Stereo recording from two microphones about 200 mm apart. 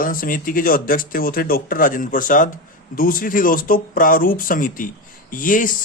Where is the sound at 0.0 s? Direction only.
45° left (ahead or behind).